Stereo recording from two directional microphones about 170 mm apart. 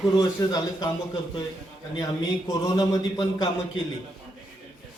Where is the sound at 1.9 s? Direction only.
20° left (ahead or behind).